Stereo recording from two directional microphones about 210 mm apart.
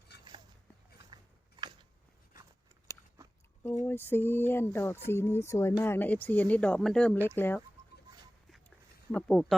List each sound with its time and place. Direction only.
0.1 s a sound: 55° left (ahead or behind)
2.9 s biting: 15° left (ahead or behind)
3.8 s speech: 10° left (ahead or behind)
9.1 s speech: 5° left (ahead or behind)